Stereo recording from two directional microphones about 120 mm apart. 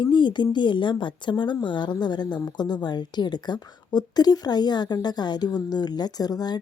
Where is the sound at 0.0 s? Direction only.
40° left (ahead or behind).